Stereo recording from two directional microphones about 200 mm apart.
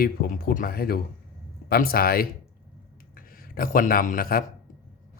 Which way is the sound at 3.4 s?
45° left (ahead or behind).